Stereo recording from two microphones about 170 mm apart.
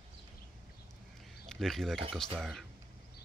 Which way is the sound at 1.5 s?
Centre (ahead or behind).